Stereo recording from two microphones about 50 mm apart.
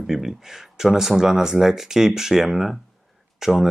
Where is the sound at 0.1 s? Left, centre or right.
Centre.